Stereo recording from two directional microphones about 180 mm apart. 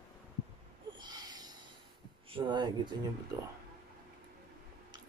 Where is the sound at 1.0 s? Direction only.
20° right (ahead or behind).